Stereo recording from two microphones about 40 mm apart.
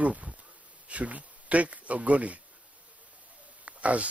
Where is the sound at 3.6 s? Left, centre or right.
Right.